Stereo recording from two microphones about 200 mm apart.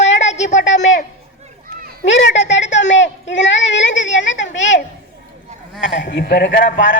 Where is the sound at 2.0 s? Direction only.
65° left (ahead or behind).